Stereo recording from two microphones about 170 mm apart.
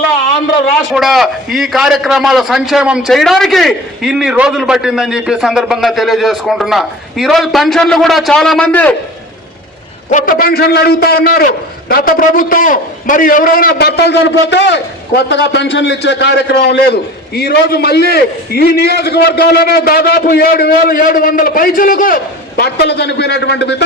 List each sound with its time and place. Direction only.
0.9 s a man's voice: centre (ahead or behind)
10.1 s a man's voice: 50° left (ahead or behind); by 23.8 s 85° left